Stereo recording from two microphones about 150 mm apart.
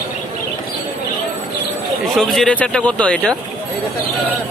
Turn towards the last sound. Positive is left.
turn(degrees=10)  # may be behind; listen again after turning